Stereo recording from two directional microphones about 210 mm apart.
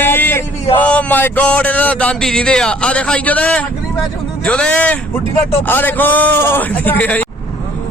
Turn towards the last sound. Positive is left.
turn(degrees=5)  # may be behind; listen again after turning